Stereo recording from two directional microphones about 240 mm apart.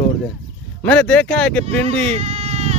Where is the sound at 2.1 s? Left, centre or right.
Right.